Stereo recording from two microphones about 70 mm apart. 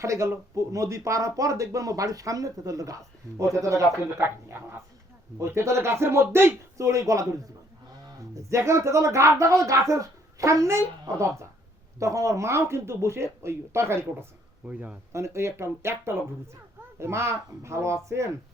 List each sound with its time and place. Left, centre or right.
0.0 s speech: right
4.2 s speech: right
11.9 s speech: right
14.7 s speech: centre
15.1 s speech: right